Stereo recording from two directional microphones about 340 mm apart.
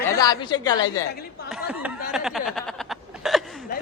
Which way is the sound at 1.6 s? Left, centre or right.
Centre.